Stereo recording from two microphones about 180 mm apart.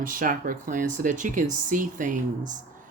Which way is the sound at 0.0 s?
50° right (ahead or behind).